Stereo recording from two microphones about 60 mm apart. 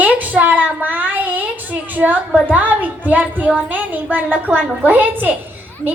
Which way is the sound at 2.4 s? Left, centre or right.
Right.